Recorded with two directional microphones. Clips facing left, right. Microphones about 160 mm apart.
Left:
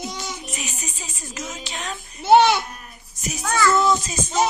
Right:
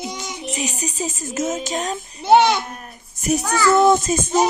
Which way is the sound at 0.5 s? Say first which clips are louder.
Right 8 dB; 35° right (ahead or behind).